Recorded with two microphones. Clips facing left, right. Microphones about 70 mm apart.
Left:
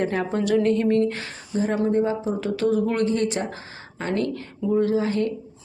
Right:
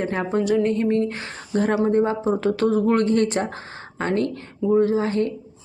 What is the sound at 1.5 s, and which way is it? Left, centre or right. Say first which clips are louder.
Speech: right 3 dB; right.